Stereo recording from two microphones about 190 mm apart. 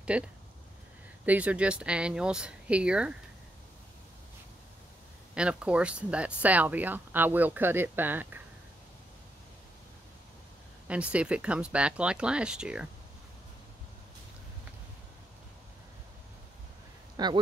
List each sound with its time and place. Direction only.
0.1 s speech: 5° right (ahead or behind)
5.3 s speech: 5° right (ahead or behind)
10.9 s speech: 5° right (ahead or behind)
17.2 s speech: 20° right (ahead or behind)